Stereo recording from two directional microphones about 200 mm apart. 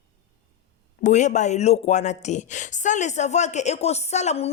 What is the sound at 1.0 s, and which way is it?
Speech, 35° left (ahead or behind).